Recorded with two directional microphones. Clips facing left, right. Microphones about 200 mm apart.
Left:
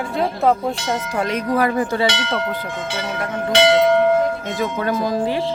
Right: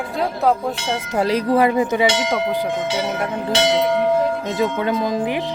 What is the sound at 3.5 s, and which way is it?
Speech, 60° left (ahead or behind).